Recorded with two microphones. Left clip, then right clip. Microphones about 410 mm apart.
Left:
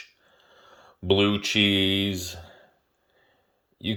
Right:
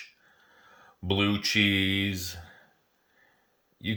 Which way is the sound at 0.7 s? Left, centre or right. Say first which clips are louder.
Left 7 dB; centre.